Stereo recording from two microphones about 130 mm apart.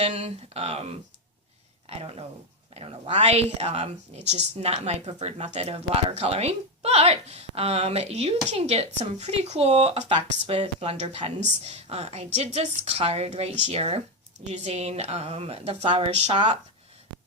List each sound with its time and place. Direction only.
0.0 s speech: 55° right (ahead or behind)